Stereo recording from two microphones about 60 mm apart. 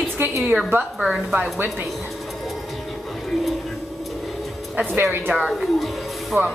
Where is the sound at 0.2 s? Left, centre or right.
Right.